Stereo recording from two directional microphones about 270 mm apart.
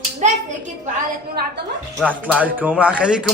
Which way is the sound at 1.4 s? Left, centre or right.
Right.